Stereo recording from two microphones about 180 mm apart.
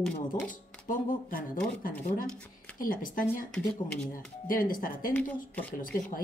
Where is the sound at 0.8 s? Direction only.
50° left (ahead or behind).